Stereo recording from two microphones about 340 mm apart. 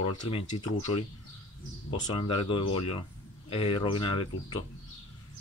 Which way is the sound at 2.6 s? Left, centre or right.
Left.